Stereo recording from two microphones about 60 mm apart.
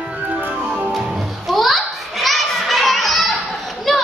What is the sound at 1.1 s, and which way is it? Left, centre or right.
Children playing, centre.